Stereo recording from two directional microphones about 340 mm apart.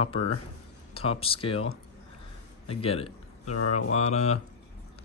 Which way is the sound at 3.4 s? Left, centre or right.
Left.